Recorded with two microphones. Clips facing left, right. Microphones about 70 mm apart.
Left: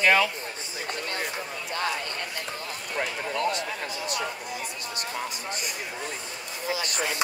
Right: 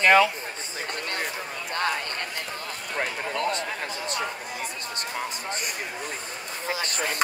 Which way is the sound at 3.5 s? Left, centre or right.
Right.